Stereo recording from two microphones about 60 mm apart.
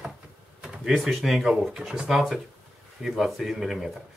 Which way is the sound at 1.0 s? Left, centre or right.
Centre.